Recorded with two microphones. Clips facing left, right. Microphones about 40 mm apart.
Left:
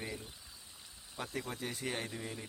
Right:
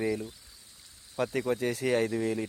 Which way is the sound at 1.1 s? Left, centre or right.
Right.